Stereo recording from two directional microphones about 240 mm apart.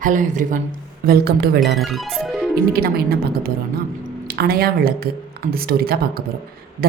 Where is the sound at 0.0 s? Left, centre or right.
Right.